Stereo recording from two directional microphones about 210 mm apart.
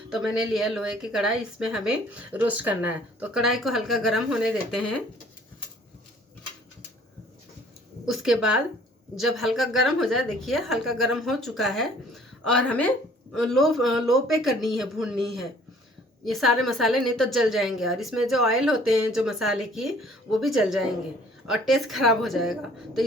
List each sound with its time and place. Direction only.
0.1 s a woman's voice: centre (ahead or behind)
8.0 s a woman's voice: centre (ahead or behind)